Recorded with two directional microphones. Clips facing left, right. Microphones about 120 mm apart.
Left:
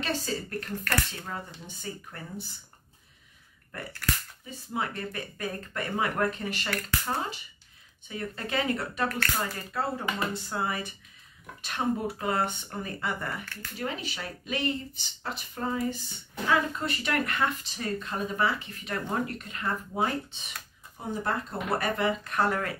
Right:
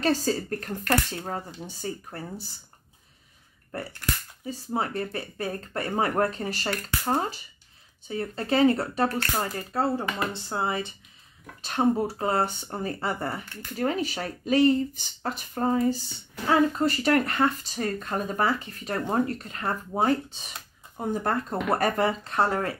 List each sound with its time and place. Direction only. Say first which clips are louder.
0.0 s speech: right 7 dB; 40° right (ahead or behind)
3.7 s speech: right 2 dB; 35° right (ahead or behind)
13.7 s speech: right 8 dB; 40° right (ahead or behind)
22.2 s speech: right 2 dB; 30° right (ahead or behind)